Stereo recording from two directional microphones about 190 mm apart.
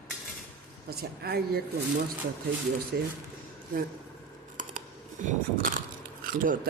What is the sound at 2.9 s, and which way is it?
Speech, 60° right (ahead or behind).